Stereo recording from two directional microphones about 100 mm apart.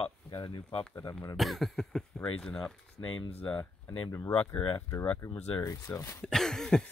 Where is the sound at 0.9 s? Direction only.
40° left (ahead or behind).